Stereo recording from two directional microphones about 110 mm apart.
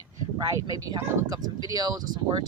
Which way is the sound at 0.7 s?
35° right (ahead or behind).